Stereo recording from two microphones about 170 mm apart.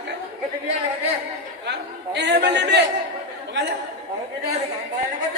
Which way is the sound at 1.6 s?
90° right.